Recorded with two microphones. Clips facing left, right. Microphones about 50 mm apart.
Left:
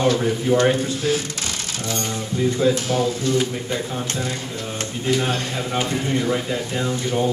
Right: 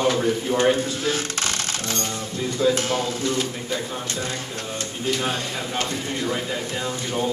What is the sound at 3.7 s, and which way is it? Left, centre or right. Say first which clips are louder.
Speech: left 2 dB; left.